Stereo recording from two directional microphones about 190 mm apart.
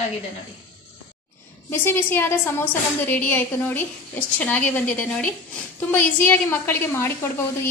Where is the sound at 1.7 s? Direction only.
10° left (ahead or behind).